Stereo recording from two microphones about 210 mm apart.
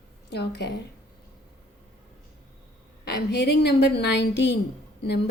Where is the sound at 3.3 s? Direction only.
55° left (ahead or behind).